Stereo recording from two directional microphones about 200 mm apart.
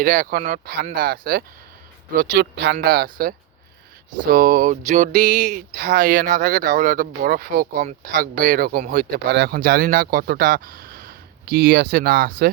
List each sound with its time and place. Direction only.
0.0 s speech: 40° right (ahead or behind)